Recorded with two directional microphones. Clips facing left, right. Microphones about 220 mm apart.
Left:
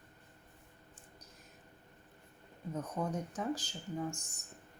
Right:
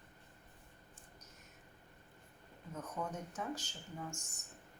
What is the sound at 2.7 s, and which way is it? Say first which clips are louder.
Speech: left 5 dB; 35° left (ahead or behind).